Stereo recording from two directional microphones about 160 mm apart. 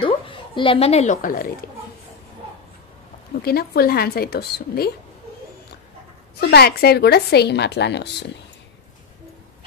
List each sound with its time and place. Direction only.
0.0 s a woman's voice: 30° left (ahead or behind); by 1.7 s 75° left (ahead or behind)
3.4 s a woman's voice: 75° left (ahead or behind)
6.5 s a woman's voice: 80° left